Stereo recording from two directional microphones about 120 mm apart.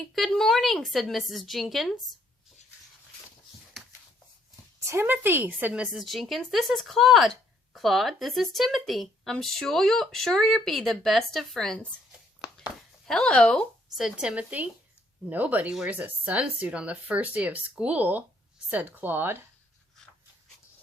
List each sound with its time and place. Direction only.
0.1 s speech: centre (ahead or behind)
4.8 s speech: 20° right (ahead or behind); by 14.0 s 5° left (ahead or behind)
14.0 s speech: 5° right (ahead or behind)